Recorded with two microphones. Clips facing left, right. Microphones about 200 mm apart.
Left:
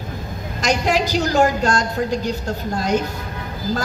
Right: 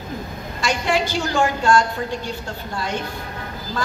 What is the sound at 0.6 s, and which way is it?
A woman's voice, 40° left (ahead or behind).